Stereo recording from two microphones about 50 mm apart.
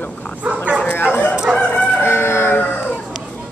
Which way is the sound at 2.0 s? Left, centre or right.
Left.